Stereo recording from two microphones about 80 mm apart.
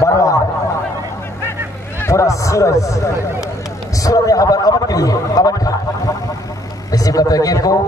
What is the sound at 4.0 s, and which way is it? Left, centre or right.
A man's voice, left.